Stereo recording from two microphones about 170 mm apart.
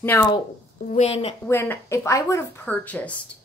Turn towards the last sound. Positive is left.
turn(degrees=10)  # may be behind; listen again after turning